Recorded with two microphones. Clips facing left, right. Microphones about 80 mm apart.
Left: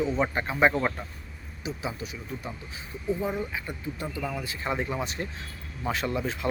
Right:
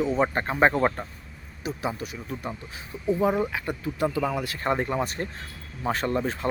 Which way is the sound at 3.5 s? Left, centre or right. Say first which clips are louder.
Right 4 dB; right.